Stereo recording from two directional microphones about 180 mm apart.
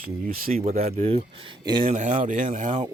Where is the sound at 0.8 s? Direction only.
35° right (ahead or behind).